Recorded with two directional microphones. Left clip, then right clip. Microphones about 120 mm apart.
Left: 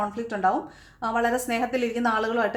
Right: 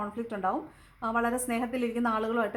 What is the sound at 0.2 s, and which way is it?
A woman's voice, 25° right (ahead or behind).